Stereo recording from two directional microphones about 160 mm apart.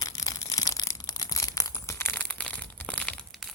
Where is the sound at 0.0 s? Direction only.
20° left (ahead or behind); by 3.5 s 5° left (ahead or behind).